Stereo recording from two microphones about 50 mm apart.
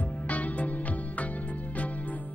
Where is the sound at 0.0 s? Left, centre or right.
Left.